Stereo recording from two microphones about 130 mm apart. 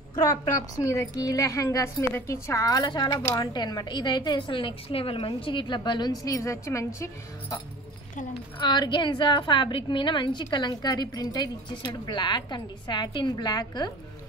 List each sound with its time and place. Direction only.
0.1 s a woman's voice: 25° left (ahead or behind)
8.5 s a woman's voice: 35° left (ahead or behind)